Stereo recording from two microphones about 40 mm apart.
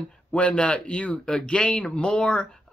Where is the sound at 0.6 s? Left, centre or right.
Left.